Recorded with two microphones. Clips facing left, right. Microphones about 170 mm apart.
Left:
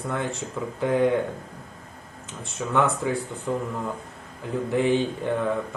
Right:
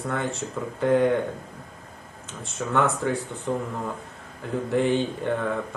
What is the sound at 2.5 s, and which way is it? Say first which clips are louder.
Speech: even; centre (ahead or behind).